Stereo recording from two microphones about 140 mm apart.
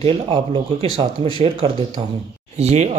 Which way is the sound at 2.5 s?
50° right (ahead or behind).